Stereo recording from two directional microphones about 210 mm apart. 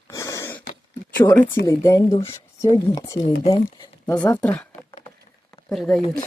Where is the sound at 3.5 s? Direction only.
20° left (ahead or behind).